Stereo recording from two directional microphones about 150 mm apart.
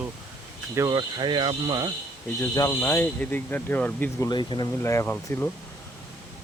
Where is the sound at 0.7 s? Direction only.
25° right (ahead or behind).